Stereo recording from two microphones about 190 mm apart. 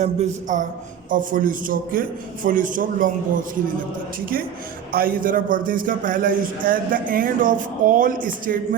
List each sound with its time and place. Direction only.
0.0 s a man's voice: 40° right (ahead or behind)
4.9 s a man's voice: 50° right (ahead or behind)